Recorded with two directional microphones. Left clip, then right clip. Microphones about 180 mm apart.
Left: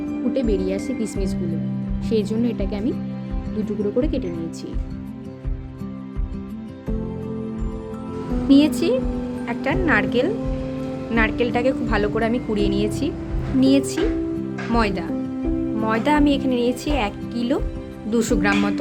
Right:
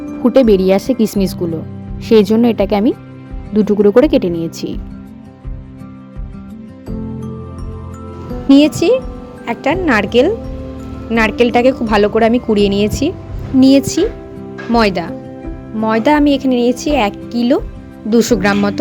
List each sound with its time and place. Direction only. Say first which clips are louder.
0.3 s speech: right 14 dB; 50° right (ahead or behind)
8.4 s a woman's voice: right 8 dB; 35° right (ahead or behind)